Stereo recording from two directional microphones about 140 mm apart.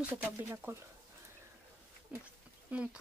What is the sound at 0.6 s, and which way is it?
Speech, 15° right (ahead or behind).